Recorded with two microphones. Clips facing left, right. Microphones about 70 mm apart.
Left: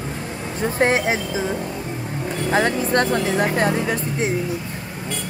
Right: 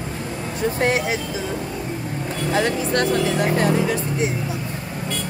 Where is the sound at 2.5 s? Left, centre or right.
Left.